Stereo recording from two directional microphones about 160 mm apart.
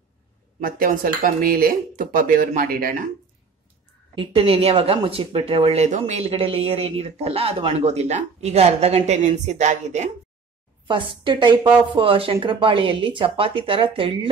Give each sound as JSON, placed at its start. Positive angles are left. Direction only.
{"t": 0.6, "sound": "speech", "side_deg": -60}
{"t": 4.1, "sound": "a woman's voice", "side_deg": -30}
{"t": 10.9, "sound": "a woman's voice", "side_deg": -30}